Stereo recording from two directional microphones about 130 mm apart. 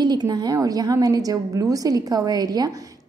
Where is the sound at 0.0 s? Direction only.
30° right (ahead or behind).